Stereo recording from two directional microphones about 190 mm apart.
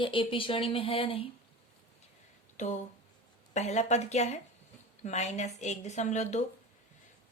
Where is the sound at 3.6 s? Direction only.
35° left (ahead or behind).